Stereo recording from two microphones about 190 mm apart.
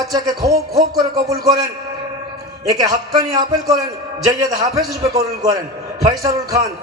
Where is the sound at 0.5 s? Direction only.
20° right (ahead or behind).